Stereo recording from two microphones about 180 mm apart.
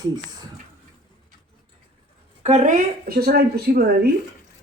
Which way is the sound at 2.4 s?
40° right (ahead or behind).